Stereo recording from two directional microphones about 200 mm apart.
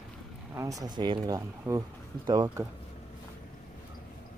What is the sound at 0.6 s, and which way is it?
Speech, 15° right (ahead or behind).